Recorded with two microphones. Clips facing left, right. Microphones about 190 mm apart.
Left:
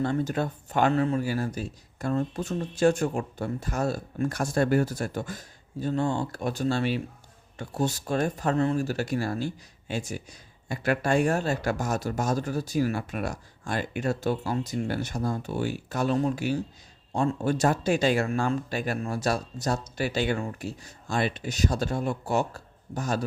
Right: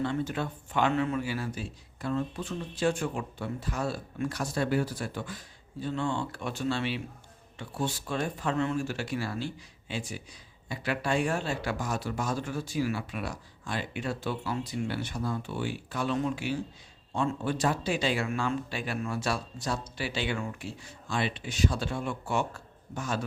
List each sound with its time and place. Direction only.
0.0 s speech: 45° left (ahead or behind)